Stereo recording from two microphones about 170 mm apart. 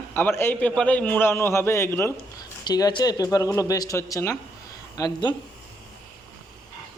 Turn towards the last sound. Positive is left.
turn(degrees=25)  # may be behind; listen again after turning